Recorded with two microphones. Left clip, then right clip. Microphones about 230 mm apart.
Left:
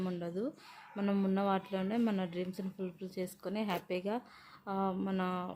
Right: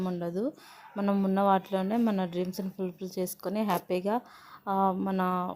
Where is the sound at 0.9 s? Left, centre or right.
Centre.